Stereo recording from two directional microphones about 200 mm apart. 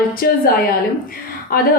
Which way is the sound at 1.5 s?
45° left (ahead or behind).